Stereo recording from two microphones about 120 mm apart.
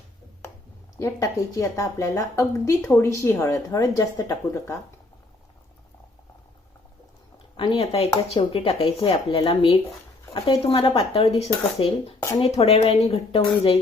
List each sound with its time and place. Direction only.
0.9 s a woman's voice: 25° left (ahead or behind)
7.5 s speech: 50° left (ahead or behind)
11.2 s speech: 60° left (ahead or behind)